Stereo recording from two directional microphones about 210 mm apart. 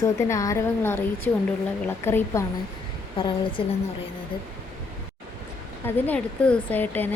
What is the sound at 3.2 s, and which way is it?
Speech, 25° left (ahead or behind).